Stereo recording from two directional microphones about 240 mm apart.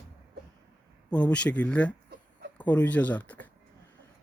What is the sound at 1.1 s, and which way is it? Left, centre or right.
A man's voice, centre.